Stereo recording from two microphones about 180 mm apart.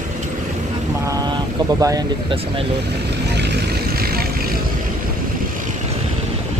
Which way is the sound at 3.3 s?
70° right (ahead or behind).